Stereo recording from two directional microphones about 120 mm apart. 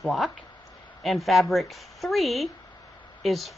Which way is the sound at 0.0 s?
Centre (ahead or behind).